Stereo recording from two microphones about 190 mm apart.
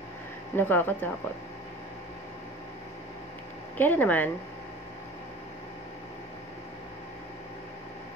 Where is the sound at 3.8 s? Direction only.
10° left (ahead or behind).